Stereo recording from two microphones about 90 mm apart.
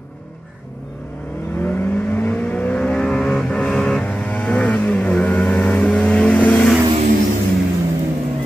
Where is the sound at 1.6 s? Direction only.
20° left (ahead or behind).